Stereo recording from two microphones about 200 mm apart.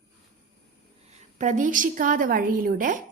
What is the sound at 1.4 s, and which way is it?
A woman's voice, 40° right (ahead or behind).